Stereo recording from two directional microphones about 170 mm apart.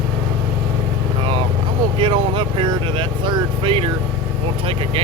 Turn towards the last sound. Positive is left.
turn(degrees=-35)  # may be behind; listen again after turning